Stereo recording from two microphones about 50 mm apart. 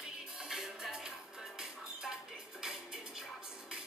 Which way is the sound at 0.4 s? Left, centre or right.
Centre.